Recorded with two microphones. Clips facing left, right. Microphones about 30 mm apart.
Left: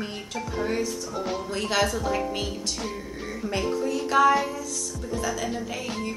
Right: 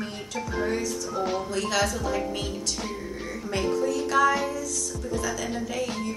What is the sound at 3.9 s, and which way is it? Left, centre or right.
Speech, centre.